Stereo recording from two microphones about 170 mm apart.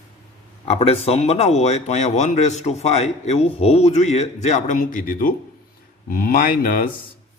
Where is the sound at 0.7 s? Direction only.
35° left (ahead or behind); by 6.9 s 55° left (ahead or behind).